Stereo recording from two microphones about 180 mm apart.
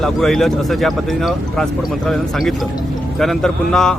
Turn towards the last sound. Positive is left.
turn(degrees=5)  # may be behind; listen again after turning